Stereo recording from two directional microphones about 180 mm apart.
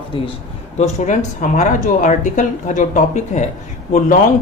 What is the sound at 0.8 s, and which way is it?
Speech, 40° left (ahead or behind).